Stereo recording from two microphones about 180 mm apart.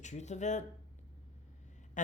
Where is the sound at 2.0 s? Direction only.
45° left (ahead or behind).